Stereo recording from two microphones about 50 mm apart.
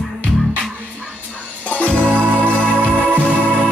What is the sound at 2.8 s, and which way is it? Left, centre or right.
Music, right.